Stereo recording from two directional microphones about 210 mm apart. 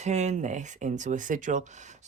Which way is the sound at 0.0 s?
35° right (ahead or behind).